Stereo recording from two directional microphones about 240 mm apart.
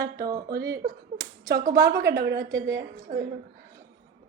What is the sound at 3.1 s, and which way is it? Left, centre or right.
Speech, right.